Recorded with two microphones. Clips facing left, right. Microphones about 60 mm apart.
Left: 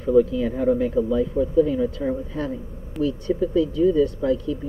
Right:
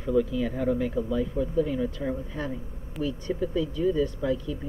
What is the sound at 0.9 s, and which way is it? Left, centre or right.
Speech, left.